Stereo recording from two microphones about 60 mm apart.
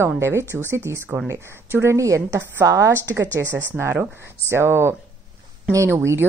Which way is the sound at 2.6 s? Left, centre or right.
Right.